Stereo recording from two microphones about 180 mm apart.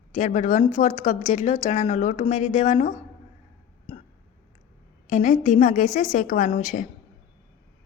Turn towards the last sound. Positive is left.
turn(degrees=45)  # may be behind; listen again after turning